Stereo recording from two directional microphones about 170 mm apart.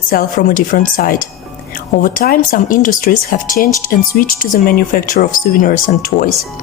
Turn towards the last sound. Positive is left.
turn(degrees=50)  # may be behind; listen again after turning